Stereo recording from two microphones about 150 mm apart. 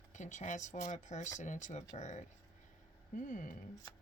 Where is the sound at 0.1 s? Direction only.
55° left (ahead or behind).